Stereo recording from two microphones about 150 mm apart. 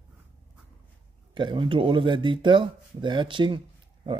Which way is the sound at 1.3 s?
30° right (ahead or behind).